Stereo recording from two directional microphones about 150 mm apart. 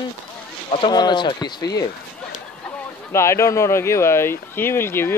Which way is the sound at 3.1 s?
20° left (ahead or behind).